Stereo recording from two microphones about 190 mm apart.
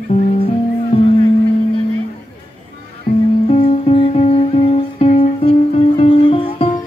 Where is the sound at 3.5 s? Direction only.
30° left (ahead or behind).